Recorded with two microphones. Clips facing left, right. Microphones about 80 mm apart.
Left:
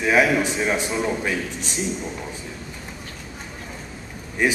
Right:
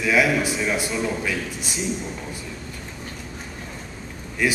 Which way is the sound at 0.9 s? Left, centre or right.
Centre.